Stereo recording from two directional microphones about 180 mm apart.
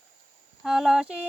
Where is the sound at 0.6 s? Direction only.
Centre (ahead or behind).